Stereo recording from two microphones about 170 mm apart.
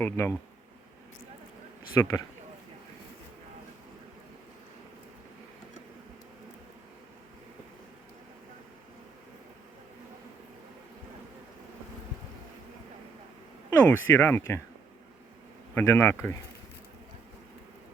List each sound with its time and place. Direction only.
0.0 s speech: 15° left (ahead or behind)
2.0 s speech: 15° left (ahead or behind)
13.7 s speech: 10° left (ahead or behind)
15.7 s speech: 15° left (ahead or behind)